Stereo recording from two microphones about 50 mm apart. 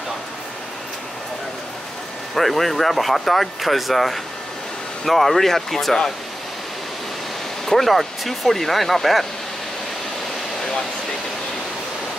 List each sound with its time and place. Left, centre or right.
2.3 s speech: centre
7.6 s speech: centre